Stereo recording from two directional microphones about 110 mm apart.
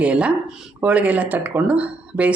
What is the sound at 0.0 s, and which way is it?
Speech, 10° right (ahead or behind).